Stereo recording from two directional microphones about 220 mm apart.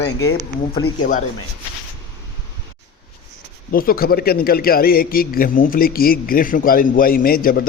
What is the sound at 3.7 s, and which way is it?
A man's voice, 40° left (ahead or behind).